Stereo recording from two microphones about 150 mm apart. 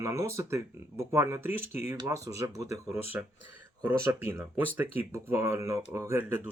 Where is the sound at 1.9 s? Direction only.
25° right (ahead or behind).